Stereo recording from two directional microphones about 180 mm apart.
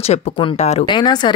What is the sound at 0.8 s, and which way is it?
Speech, 25° left (ahead or behind).